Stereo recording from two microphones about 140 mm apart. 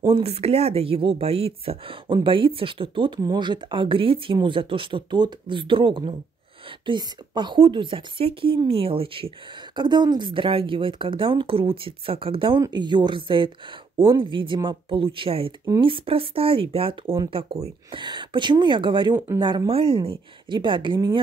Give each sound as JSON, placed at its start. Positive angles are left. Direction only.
{"t": 0.0, "sound": "speech", "side_deg": -45}